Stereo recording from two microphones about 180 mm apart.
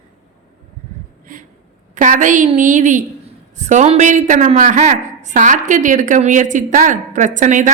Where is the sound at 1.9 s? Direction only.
45° right (ahead or behind).